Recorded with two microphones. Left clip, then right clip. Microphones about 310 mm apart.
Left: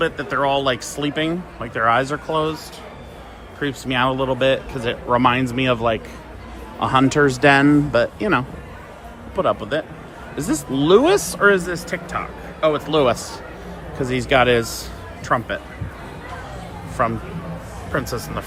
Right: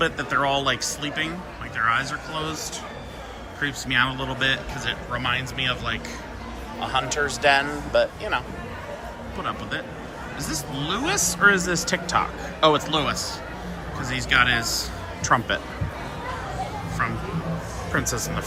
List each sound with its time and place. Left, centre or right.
0.0 s speech: centre
3.6 s speech: centre
9.4 s speech: centre
17.0 s speech: centre